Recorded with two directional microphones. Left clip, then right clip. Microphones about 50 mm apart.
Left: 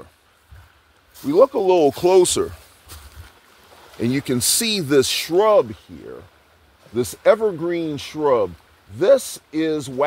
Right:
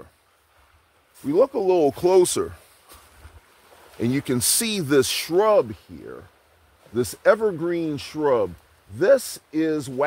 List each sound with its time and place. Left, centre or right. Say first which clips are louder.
1.3 s speech: left 4 dB; centre
4.0 s speech: left 2 dB; centre
6.9 s speech: left 3 dB; right